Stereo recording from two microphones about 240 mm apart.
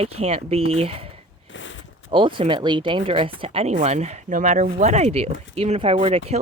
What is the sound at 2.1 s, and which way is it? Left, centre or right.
Speech, right.